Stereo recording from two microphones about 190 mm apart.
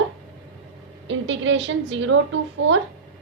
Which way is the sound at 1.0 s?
80° right.